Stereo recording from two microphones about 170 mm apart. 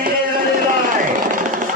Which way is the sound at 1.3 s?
50° right (ahead or behind).